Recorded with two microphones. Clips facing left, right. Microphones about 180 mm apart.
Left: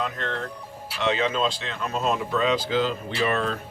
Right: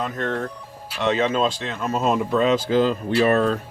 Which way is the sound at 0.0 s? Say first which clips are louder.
Right 4 dB; 45° right (ahead or behind).